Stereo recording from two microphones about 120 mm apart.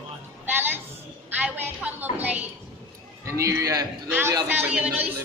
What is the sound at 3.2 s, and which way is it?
Speech, 25° right (ahead or behind).